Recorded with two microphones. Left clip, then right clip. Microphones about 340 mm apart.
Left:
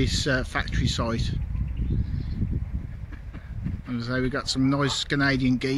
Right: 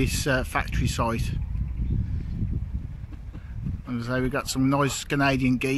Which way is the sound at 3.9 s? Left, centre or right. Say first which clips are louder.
Even; centre.